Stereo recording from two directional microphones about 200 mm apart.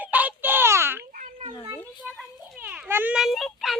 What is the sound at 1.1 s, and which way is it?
Children playing, 40° right (ahead or behind).